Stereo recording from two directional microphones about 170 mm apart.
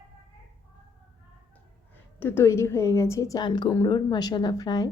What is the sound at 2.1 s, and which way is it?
A woman's voice, 10° left (ahead or behind).